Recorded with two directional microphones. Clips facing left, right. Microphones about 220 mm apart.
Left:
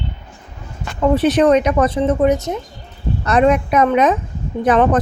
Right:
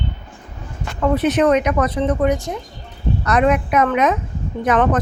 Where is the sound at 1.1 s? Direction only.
30° left (ahead or behind).